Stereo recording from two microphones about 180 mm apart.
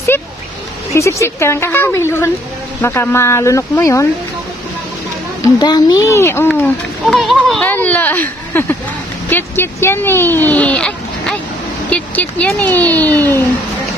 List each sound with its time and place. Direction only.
0.1 s a sound: 10° left (ahead or behind)
0.9 s a child's voice: 15° left (ahead or behind)
5.4 s a child's voice: 25° left (ahead or behind)